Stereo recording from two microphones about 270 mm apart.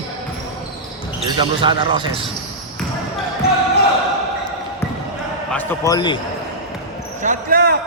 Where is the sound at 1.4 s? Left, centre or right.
Centre.